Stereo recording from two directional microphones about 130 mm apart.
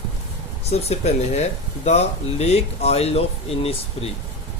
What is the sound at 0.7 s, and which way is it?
Speech, 55° left (ahead or behind).